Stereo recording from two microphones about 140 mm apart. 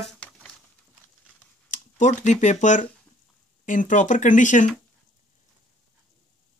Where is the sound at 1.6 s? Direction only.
60° left (ahead or behind).